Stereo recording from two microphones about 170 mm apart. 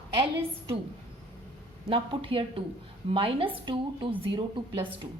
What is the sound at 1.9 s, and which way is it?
A woman's voice, 30° right (ahead or behind).